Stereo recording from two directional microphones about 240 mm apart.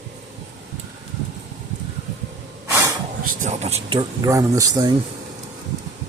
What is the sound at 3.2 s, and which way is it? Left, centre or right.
Speech, right.